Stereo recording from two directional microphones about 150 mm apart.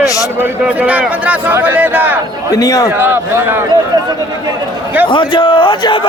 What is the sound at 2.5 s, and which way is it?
Speech, 25° left (ahead or behind).